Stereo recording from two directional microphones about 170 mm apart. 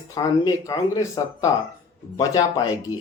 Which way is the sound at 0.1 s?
20° left (ahead or behind).